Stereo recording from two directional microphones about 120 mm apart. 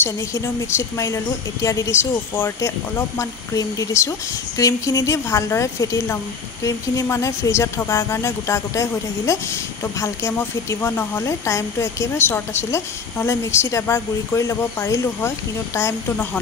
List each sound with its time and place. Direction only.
0.0 s speech: 20° left (ahead or behind)